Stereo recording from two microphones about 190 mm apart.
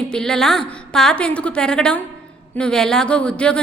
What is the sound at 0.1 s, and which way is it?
A woman's voice, 5° left (ahead or behind).